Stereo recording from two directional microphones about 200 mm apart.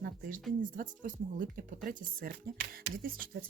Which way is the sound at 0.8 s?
40° right (ahead or behind).